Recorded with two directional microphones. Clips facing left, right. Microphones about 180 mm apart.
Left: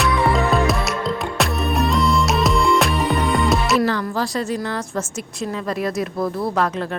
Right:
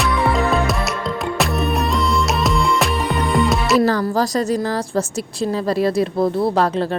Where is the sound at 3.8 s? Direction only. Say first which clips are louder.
Right 4 dB; 40° right (ahead or behind).